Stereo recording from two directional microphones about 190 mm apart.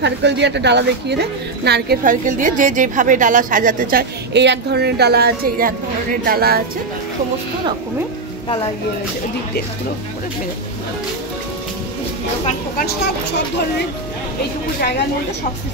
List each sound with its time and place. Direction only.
0.0 s a woman's voice: 65° right (ahead or behind)
12.4 s speech: 50° left (ahead or behind)